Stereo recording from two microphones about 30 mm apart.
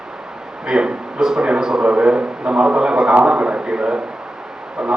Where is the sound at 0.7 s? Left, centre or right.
Right.